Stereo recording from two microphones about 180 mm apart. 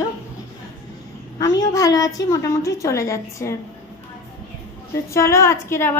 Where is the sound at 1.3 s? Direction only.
20° left (ahead or behind).